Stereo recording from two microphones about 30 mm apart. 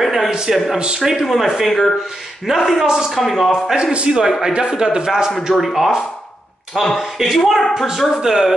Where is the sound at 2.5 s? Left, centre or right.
Right.